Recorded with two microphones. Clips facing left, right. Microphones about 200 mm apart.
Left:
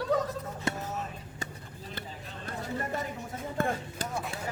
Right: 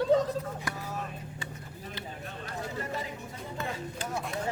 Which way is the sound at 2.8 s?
50° left (ahead or behind).